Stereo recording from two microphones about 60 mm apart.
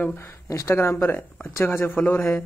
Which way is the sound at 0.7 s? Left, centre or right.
Left.